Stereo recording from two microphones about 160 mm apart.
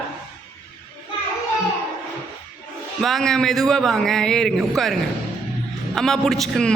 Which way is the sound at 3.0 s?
Centre (ahead or behind).